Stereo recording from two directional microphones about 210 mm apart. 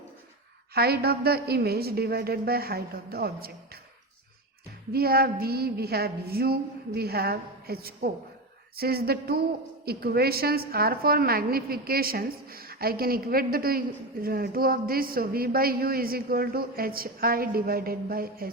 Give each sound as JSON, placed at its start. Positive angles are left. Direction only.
{"t": 0.7, "sound": "a woman's voice", "side_deg": -50}
{"t": 4.9, "sound": "a woman's voice", "side_deg": -45}